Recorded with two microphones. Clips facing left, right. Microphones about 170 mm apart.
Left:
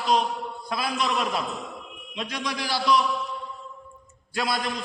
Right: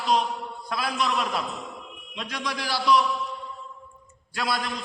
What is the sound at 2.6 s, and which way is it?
Speech, 5° right (ahead or behind).